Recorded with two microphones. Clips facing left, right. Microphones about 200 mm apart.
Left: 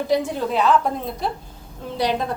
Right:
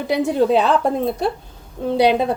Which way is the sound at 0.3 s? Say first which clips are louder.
Right 4 dB; 65° right (ahead or behind).